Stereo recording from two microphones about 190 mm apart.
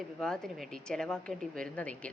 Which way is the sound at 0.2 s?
Centre (ahead or behind).